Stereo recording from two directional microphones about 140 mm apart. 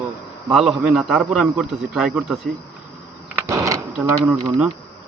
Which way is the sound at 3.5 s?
25° right (ahead or behind).